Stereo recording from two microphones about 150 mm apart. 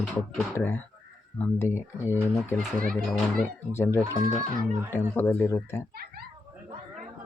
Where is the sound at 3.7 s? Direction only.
15° left (ahead or behind).